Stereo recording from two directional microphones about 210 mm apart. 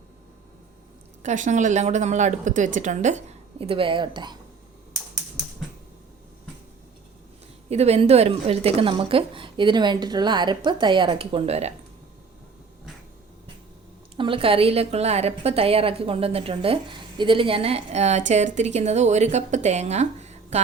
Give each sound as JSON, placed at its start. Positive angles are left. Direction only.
{"t": 1.2, "sound": "a woman's voice", "side_deg": -35}
{"t": 7.7, "sound": "a woman's voice", "side_deg": -30}
{"t": 14.2, "sound": "a woman's voice", "side_deg": -25}